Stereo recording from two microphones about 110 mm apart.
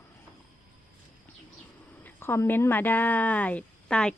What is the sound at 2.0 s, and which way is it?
A woman's voice, 20° left (ahead or behind).